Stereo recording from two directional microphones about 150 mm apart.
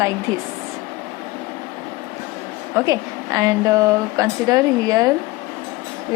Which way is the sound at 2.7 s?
20° right (ahead or behind).